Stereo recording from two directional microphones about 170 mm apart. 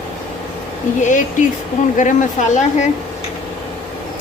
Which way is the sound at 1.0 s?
45° left (ahead or behind).